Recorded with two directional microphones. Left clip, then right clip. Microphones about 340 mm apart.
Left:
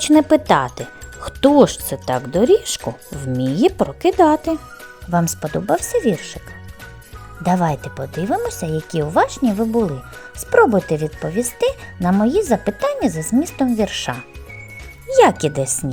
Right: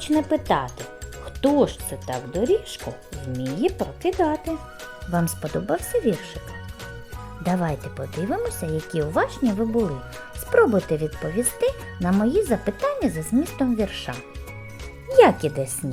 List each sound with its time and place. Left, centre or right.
0.0 s speech: centre
5.1 s speech: centre
7.4 s speech: centre